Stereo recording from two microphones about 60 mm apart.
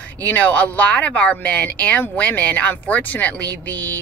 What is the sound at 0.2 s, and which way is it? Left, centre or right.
Speech, left.